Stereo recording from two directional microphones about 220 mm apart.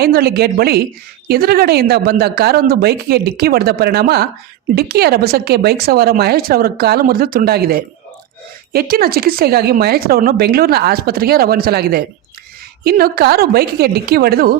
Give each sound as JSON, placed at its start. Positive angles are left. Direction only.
{"t": 0.0, "sound": "speech", "side_deg": -45}